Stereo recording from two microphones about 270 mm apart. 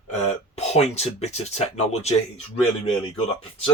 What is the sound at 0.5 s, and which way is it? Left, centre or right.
Speech, left.